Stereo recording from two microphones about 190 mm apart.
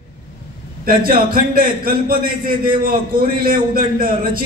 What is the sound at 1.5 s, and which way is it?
A man's voice, 50° right (ahead or behind).